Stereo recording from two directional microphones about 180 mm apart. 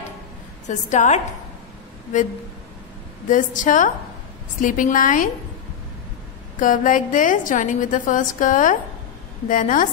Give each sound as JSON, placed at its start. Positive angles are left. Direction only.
{"t": 0.7, "sound": "a woman's voice", "side_deg": 40}
{"t": 3.3, "sound": "a woman's voice", "side_deg": 45}
{"t": 6.6, "sound": "a woman's voice", "side_deg": 50}